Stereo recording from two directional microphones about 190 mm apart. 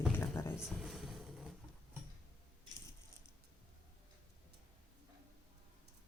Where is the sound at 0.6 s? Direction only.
Centre (ahead or behind).